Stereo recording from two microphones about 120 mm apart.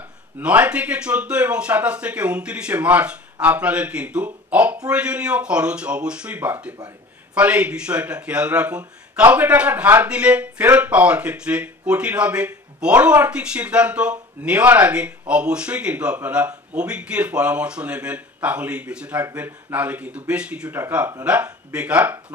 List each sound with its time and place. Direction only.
0.4 s speech: 10° right (ahead or behind)